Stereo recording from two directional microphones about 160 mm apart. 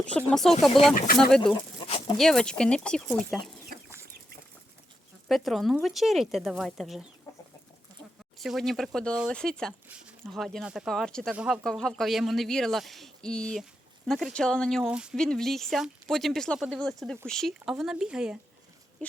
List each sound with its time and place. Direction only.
0.0 s speech: 5° left (ahead or behind)
1.8 s a sound: 30° left (ahead or behind)
2.1 s speech: 5° left (ahead or behind)
5.3 s speech: centre (ahead or behind)
8.4 s speech: centre (ahead or behind)